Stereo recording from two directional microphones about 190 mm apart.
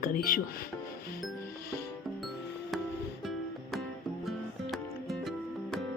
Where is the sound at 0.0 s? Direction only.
45° left (ahead or behind).